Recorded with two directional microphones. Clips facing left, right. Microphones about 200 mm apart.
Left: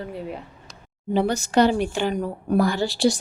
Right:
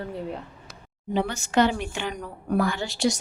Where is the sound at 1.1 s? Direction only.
35° left (ahead or behind).